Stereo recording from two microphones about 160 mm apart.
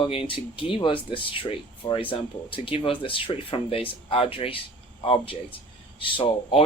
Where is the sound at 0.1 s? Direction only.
35° left (ahead or behind).